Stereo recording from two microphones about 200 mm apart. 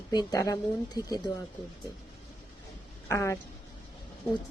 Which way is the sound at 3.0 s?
15° left (ahead or behind).